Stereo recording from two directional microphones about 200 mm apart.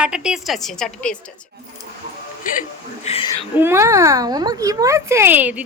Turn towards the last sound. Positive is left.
turn(degrees=-10)  # may be behind; listen again after turning